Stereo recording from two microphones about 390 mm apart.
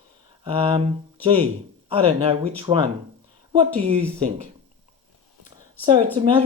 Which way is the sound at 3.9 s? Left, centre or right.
Centre.